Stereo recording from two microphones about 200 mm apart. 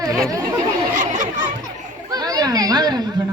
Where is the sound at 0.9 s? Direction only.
40° right (ahead or behind).